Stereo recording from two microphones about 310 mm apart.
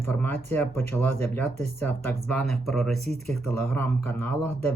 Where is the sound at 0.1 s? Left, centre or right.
Centre.